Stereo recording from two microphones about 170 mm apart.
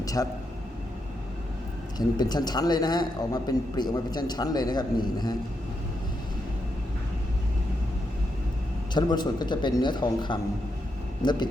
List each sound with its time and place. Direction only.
0.0 s a man's voice: 20° left (ahead or behind)
2.0 s speech: 25° left (ahead or behind)
8.9 s speech: 25° left (ahead or behind)